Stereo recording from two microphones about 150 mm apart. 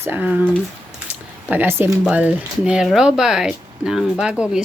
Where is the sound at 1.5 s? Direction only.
15° right (ahead or behind).